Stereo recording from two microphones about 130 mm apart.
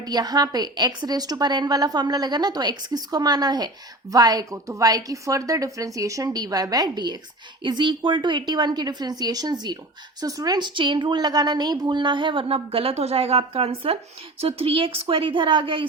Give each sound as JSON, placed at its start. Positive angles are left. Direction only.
{"t": 0.0, "sound": "a woman's voice", "side_deg": -30}